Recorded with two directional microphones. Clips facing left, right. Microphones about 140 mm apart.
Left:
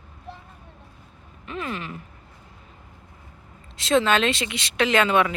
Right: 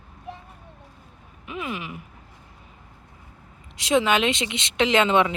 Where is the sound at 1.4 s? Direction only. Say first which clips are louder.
Even; 10° right (ahead or behind).